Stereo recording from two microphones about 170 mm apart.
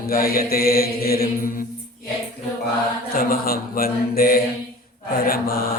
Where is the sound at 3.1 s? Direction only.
60° left (ahead or behind).